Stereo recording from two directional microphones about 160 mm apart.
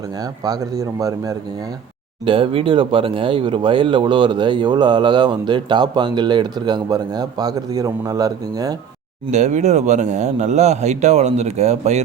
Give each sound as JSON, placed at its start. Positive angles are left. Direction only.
{"t": 0.4, "sound": "speech", "side_deg": -20}
{"t": 2.2, "sound": "speech", "side_deg": -35}
{"t": 9.3, "sound": "speech", "side_deg": -45}